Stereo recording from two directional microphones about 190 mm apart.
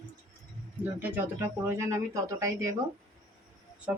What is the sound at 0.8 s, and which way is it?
Speech, 10° right (ahead or behind).